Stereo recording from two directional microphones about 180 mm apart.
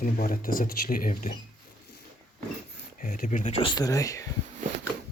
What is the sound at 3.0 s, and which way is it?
Speech, 50° left (ahead or behind).